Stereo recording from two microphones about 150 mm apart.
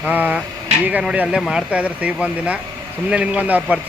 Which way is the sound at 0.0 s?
10° right (ahead or behind).